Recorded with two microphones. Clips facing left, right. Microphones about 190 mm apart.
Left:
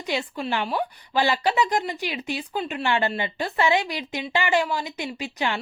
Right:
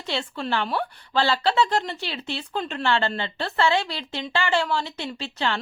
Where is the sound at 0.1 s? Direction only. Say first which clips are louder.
Even; 15° left (ahead or behind).